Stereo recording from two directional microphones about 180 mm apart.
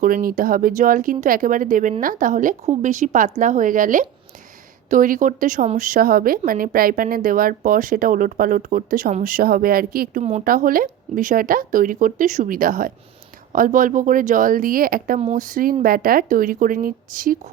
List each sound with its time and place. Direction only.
0.0 s a woman's voice: 50° right (ahead or behind)